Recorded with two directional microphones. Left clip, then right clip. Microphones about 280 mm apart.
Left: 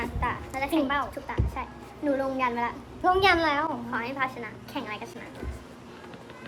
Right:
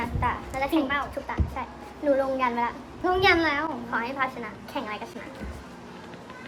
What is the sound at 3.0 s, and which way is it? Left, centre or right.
Speech, centre.